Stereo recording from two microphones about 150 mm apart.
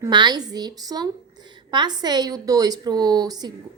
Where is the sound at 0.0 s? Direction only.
30° right (ahead or behind).